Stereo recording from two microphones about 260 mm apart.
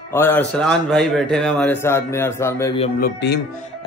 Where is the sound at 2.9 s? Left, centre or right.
Left.